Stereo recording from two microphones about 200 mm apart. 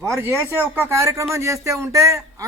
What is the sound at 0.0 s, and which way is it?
Speech, 15° right (ahead or behind).